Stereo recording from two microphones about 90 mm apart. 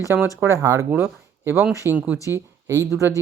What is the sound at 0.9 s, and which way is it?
Speech, 25° right (ahead or behind).